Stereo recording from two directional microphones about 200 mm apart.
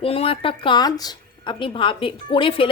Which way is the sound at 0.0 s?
30° left (ahead or behind).